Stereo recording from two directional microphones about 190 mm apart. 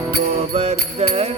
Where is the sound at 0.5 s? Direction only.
30° right (ahead or behind).